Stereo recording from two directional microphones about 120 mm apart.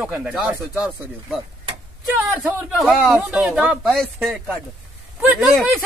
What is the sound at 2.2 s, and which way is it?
Speech, 15° right (ahead or behind).